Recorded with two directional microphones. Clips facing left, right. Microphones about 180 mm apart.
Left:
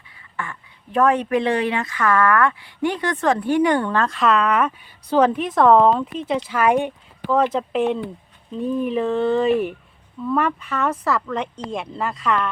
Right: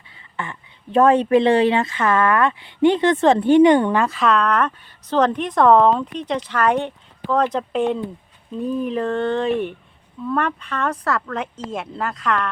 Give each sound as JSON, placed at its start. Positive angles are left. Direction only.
{"t": 0.3, "sound": "a woman's voice", "side_deg": -25}
{"t": 4.0, "sound": "speech", "side_deg": 0}